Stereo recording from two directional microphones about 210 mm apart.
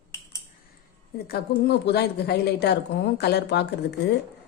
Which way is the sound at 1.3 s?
50° left (ahead or behind).